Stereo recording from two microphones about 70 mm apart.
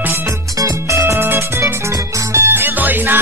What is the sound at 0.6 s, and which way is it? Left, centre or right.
Music, right.